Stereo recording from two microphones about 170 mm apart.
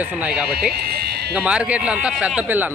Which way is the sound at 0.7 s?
70° right (ahead or behind).